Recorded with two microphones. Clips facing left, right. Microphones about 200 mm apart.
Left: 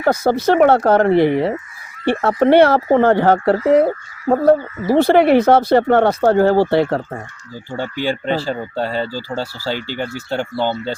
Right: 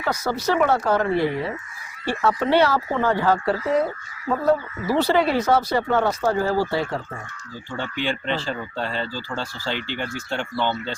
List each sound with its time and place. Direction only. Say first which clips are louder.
0.0 s speech: left 9 dB; 55° left (ahead or behind)
7.7 s speech: left 5 dB; 40° left (ahead or behind)